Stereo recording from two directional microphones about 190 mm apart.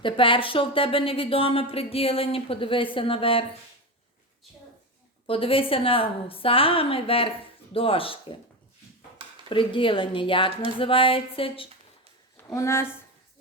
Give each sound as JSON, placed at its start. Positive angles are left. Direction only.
{"t": 0.0, "sound": "speech", "side_deg": 25}
{"t": 5.2, "sound": "speech", "side_deg": 30}
{"t": 9.5, "sound": "speech", "side_deg": 25}
{"t": 12.5, "sound": "speech", "side_deg": 15}